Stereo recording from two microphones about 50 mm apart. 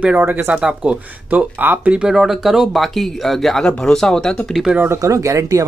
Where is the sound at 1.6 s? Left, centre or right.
Right.